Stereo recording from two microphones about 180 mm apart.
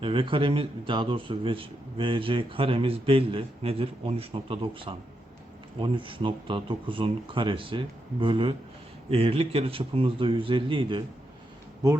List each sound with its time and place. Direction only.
0.0 s a man's voice: 30° right (ahead or behind)